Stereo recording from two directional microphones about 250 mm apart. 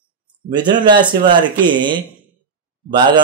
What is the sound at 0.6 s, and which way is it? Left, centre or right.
Speech, centre.